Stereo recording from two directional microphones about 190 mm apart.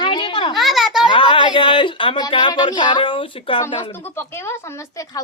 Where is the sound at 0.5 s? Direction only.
Centre (ahead or behind).